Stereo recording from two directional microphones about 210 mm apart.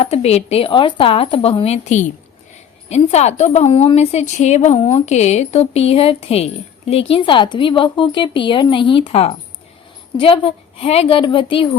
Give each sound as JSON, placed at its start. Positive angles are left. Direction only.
{"t": 0.0, "sound": "a woman's voice", "side_deg": 30}